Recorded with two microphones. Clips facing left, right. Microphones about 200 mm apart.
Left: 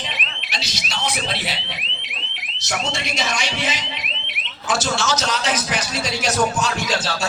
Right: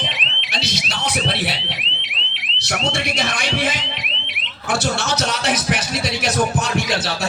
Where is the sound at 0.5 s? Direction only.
55° right (ahead or behind).